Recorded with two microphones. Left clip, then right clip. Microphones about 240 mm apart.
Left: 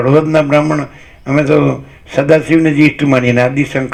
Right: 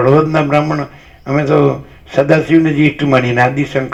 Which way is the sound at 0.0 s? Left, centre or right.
Left.